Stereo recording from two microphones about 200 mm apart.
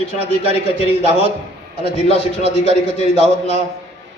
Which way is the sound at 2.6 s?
35° left (ahead or behind).